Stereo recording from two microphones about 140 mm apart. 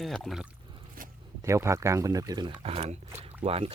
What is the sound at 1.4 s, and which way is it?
Speech, 20° right (ahead or behind).